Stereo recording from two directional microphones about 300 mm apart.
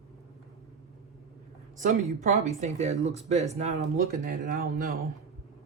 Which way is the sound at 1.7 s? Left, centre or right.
Right.